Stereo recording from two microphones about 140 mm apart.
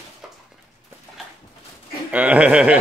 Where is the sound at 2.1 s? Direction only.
10° right (ahead or behind).